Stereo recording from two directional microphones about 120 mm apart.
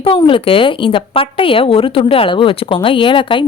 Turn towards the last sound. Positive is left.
turn(degrees=45)  # may be behind; listen again after turning